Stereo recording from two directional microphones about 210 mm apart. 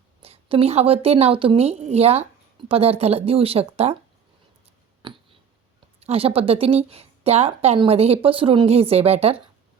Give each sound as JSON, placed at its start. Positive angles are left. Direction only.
{"t": 0.2, "sound": "a woman's voice", "side_deg": -25}
{"t": 5.0, "sound": "a sound", "side_deg": -25}
{"t": 6.0, "sound": "a woman's voice", "side_deg": -30}